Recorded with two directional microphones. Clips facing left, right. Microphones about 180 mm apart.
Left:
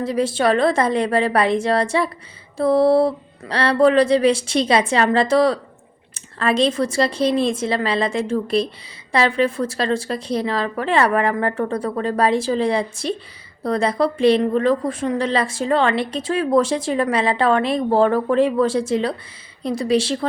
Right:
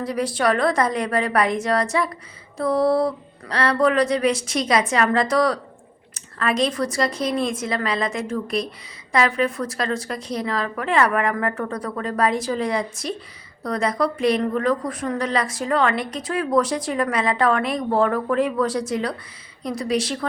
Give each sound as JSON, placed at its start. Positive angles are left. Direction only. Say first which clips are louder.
{"t": 0.0, "sound": "a woman's voice", "louder": "left 3 dB", "side_deg": 25}